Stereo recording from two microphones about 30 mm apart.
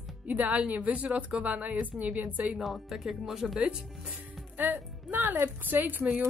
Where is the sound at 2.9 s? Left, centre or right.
Centre.